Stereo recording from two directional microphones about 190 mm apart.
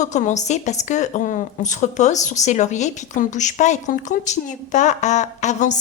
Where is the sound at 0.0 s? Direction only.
40° left (ahead or behind).